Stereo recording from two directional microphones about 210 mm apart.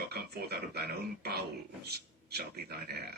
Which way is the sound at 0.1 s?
50° right (ahead or behind).